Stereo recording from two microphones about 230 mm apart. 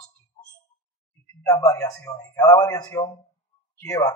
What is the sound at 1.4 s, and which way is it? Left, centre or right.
A man's voice, centre.